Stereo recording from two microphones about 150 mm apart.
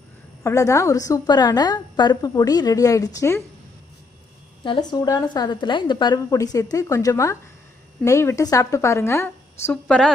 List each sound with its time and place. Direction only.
0.4 s a woman's voice: 20° left (ahead or behind)
4.6 s a woman's voice: 25° left (ahead or behind)
9.8 s a woman's voice: 5° left (ahead or behind)